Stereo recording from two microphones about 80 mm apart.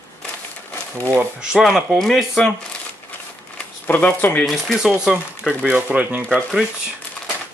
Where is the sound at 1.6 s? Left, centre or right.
Centre.